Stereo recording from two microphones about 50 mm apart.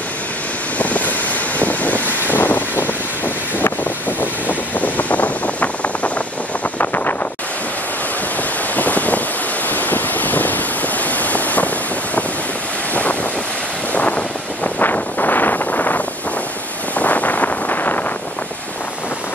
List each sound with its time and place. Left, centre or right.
0.7 s vehicle: left
3.8 s vehicle: left
6.8 s wind noise: left
8.7 s wind noise: left
9.7 s waves: left
12.9 s wind noise: left
17.0 s wind noise: left